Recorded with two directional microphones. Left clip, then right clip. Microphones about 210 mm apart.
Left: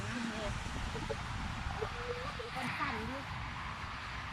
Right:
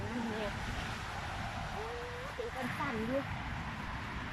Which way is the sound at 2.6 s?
35° right (ahead or behind).